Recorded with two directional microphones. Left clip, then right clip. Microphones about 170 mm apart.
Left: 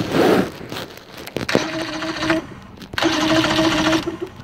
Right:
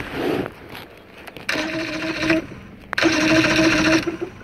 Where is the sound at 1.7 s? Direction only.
15° right (ahead or behind).